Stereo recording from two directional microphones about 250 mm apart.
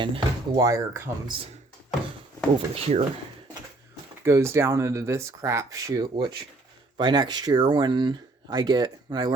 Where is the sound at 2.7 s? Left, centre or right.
Right.